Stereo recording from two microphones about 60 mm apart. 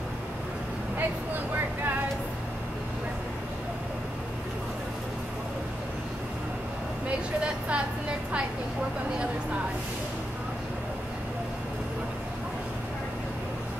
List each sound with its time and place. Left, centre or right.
7.1 s vehicle: centre